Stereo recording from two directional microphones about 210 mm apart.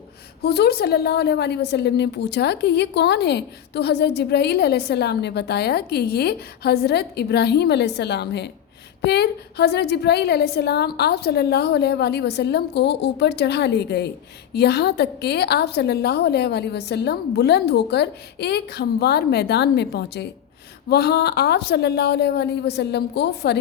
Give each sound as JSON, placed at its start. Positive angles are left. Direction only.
{"t": 0.4, "sound": "a woman's voice", "side_deg": 50}